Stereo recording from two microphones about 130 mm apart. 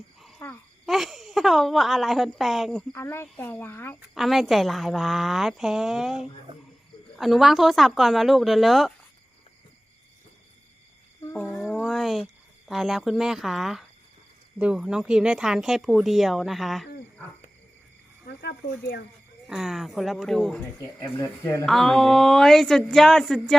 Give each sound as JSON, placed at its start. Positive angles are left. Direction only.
{"t": 0.3, "sound": "a sound", "side_deg": 15}
{"t": 0.9, "sound": "a woman's voice", "side_deg": 0}
{"t": 2.9, "sound": "speech", "side_deg": 20}
{"t": 4.1, "sound": "speech", "side_deg": 0}
{"t": 11.2, "sound": "music", "side_deg": 20}
{"t": 11.6, "sound": "speech", "side_deg": 0}
{"t": 19.5, "sound": "speech", "side_deg": -5}
{"t": 21.2, "sound": "speech", "side_deg": 25}
{"t": 21.7, "sound": "speech", "side_deg": 5}